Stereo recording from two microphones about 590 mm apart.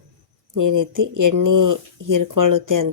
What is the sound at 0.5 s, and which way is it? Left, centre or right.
Speech, right.